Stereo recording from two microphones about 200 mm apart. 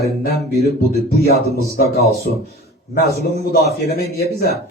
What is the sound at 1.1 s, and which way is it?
Speech, 50° left (ahead or behind).